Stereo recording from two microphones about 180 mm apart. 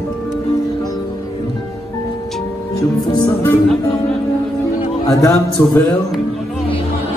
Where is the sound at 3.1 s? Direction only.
25° left (ahead or behind).